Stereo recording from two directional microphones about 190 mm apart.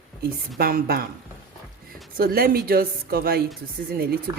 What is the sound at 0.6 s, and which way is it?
Speech, 50° right (ahead or behind).